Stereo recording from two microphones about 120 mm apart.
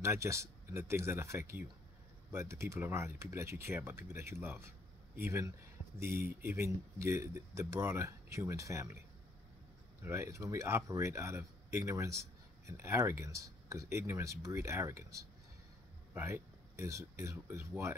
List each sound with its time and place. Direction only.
0.0 s speech: 25° right (ahead or behind)
10.0 s speech: 25° right (ahead or behind)